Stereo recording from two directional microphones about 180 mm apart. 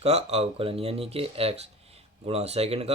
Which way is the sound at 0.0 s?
35° right (ahead or behind).